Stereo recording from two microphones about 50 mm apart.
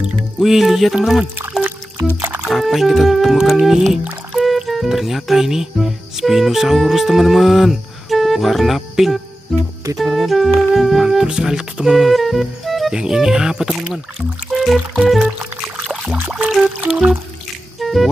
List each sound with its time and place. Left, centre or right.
0.0 s speech: centre
2.4 s speech: centre
12.9 s speech: centre
14.5 s music: centre
15.0 s speech: centre
16.3 s speech: centre
16.6 s music: right
17.7 s music: centre